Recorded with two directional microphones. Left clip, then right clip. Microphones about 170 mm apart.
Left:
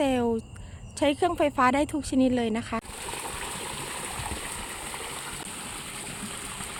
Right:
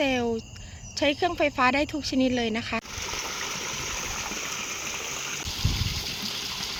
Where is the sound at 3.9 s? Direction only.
Centre (ahead or behind).